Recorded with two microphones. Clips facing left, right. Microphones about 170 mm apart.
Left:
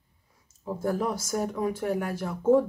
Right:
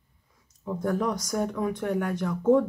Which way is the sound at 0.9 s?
5° left (ahead or behind).